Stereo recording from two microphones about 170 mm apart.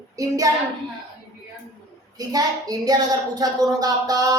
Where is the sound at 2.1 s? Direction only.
20° right (ahead or behind).